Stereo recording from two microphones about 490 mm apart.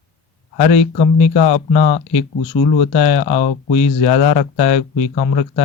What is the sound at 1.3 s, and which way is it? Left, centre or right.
Speech, left.